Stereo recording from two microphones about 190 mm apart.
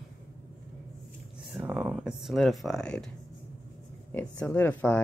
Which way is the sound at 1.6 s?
5° right (ahead or behind).